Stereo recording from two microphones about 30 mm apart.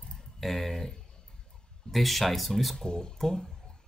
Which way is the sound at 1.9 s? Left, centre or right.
Centre.